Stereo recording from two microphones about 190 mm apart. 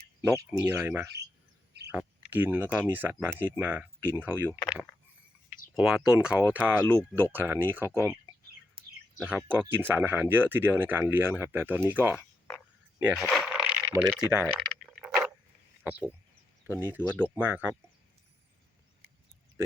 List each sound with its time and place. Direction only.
0.2 s speech: 15° right (ahead or behind)
8.8 s chirp: 30° right (ahead or behind)
9.5 s speech: 10° right (ahead or behind)
13.2 s a sound: centre (ahead or behind)
14.0 s speech: 5° right (ahead or behind)
14.8 s a sound: 5° right (ahead or behind)
15.8 s speech: 10° right (ahead or behind)